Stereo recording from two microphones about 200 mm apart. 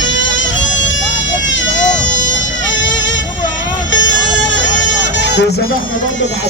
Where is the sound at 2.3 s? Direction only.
65° left (ahead or behind).